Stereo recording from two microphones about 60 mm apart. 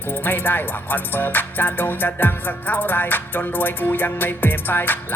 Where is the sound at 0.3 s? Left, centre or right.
Left.